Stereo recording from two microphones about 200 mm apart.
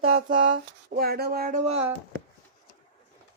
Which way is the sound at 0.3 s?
45° right (ahead or behind).